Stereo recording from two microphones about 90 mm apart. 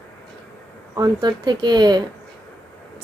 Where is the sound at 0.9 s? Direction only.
45° right (ahead or behind).